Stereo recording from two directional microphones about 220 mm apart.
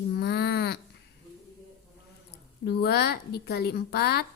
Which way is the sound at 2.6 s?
50° left (ahead or behind).